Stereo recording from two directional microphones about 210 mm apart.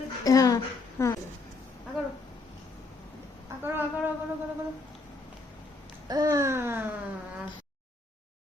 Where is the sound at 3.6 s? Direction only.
10° right (ahead or behind).